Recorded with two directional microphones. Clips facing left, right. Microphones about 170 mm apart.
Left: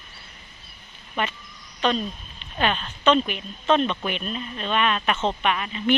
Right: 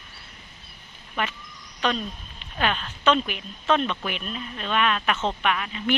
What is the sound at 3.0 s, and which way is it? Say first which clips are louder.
Speech: left 2 dB; 5° right (ahead or behind).